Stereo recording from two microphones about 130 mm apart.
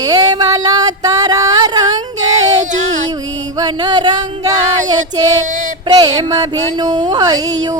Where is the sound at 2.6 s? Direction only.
65° right (ahead or behind).